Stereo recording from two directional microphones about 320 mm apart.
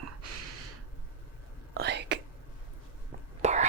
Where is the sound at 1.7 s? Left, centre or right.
Right.